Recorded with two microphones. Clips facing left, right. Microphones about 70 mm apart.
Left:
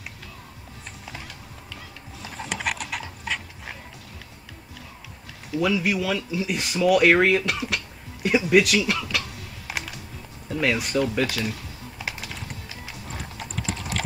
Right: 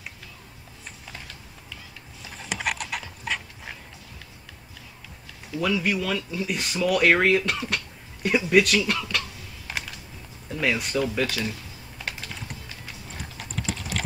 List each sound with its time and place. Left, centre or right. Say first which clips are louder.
1.0 s music: left 4 dB; centre
2.2 s a sound: left 6 dB; left
2.5 s a sound: even; centre
5.5 s speech: left 2 dB; centre
9.7 s typing: left 1 dB; centre
10.5 s speech: left 2 dB; centre
12.0 s clip-clop: left 1 dB; centre